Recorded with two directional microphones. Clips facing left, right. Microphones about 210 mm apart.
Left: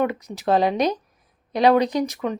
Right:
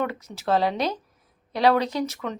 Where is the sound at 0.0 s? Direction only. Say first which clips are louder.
Left 5 dB; 15° left (ahead or behind).